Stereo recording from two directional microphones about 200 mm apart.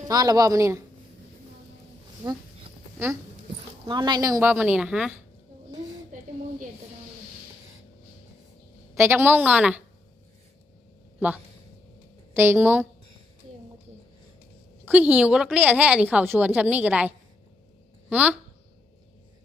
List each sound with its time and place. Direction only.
0.1 s a woman's voice: 20° right (ahead or behind)
3.8 s a woman's voice: 20° right (ahead or behind); by 5.1 s 5° right (ahead or behind)
6.1 s a sound: 40° right (ahead or behind)
9.0 s a woman's voice: 10° right (ahead or behind)
12.3 s a woman's voice: 10° right (ahead or behind)
14.8 s a woman's voice: 10° right (ahead or behind)